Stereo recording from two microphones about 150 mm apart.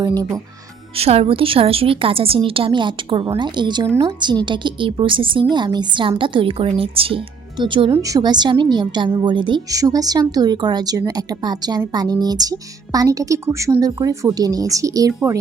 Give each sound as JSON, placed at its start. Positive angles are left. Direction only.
{"t": 0.0, "sound": "a woman's voice", "side_deg": -25}
{"t": 0.9, "sound": "a woman's voice", "side_deg": -40}
{"t": 3.8, "sound": "a woman's voice", "side_deg": -20}
{"t": 4.2, "sound": "a woman's voice", "side_deg": -30}
{"t": 7.9, "sound": "a woman's voice", "side_deg": -20}